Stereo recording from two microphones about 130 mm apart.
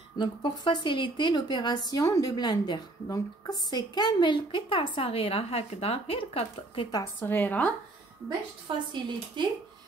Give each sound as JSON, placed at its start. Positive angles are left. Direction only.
{"t": 0.2, "sound": "a woman's voice", "side_deg": 40}
{"t": 7.2, "sound": "a woman's voice", "side_deg": 15}
{"t": 8.7, "sound": "speech", "side_deg": -35}